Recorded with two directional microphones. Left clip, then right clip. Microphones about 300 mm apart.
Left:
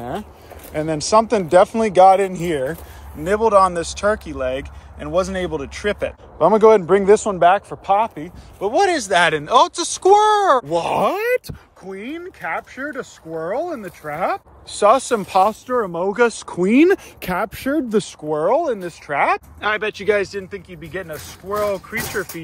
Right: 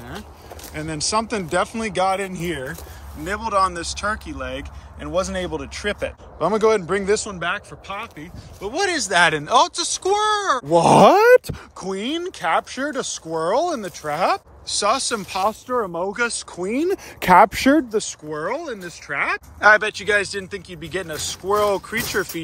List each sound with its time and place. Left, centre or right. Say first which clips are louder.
0.7 s speech: left 7 dB; centre
10.7 s speech: right 6 dB; right
11.4 s speech: right 5 dB; centre
15.7 s speech: left 2 dB; right
16.1 s speech: left 6 dB; centre
16.5 s speech: left 11 dB; left
17.2 s speech: right 10 dB; centre
18.3 s speech: left 9 dB; centre